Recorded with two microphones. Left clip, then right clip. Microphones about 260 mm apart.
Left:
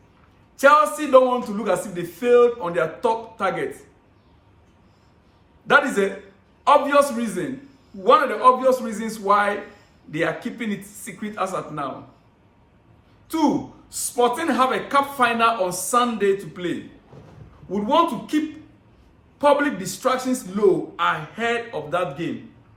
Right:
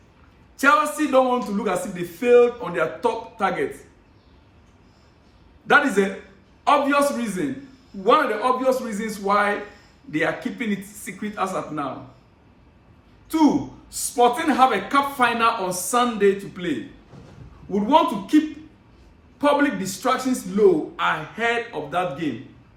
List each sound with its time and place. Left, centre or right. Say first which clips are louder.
0.5 s a man's voice: left 3 dB; centre
5.6 s a man's voice: even; centre
13.3 s a man's voice: right 2 dB; centre
19.4 s a man's voice: left 1 dB; centre